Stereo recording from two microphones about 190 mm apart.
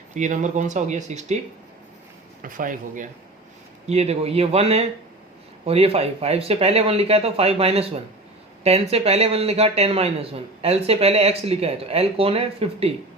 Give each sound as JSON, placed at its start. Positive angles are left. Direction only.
{"t": 0.1, "sound": "speech", "side_deg": -40}
{"t": 2.4, "sound": "speech", "side_deg": -45}
{"t": 3.8, "sound": "speech", "side_deg": -35}